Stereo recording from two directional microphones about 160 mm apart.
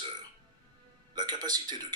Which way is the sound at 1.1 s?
25° right (ahead or behind).